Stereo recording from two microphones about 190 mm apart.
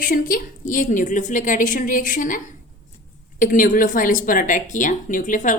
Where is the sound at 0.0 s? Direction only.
50° left (ahead or behind).